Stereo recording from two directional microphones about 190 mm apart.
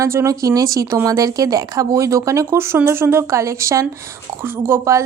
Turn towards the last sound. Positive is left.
turn(degrees=-15)  # may be behind; listen again after turning